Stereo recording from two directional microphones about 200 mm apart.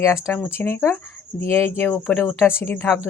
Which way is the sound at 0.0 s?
15° left (ahead or behind).